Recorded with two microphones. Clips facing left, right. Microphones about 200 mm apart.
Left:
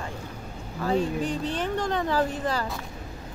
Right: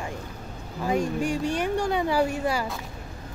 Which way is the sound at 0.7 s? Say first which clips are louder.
Even; 15° right (ahead or behind).